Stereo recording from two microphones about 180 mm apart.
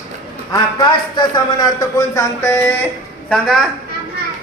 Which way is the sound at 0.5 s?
25° left (ahead or behind).